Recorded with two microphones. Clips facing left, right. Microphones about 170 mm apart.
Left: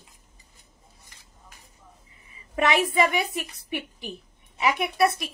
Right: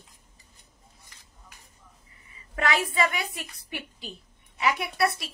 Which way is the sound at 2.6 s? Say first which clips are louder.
Left 4 dB; 20° left (ahead or behind).